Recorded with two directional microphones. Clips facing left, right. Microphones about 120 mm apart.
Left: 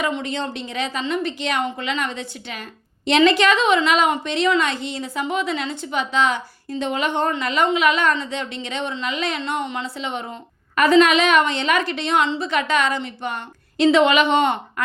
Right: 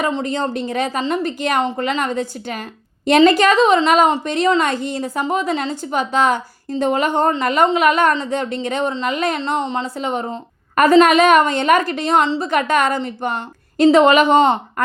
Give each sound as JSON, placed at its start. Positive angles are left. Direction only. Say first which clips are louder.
{"t": 0.0, "sound": "a woman's voice", "louder": "right 4 dB", "side_deg": -40}